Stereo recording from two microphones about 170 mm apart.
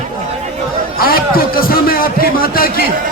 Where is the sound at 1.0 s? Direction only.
60° left (ahead or behind).